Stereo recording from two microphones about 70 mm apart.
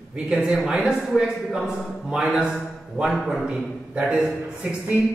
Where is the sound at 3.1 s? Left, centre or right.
Centre.